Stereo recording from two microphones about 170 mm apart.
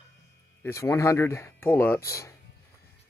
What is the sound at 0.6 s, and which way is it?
Speech, 15° left (ahead or behind).